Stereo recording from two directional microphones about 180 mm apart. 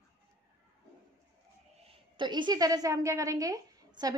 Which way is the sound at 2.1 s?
25° right (ahead or behind).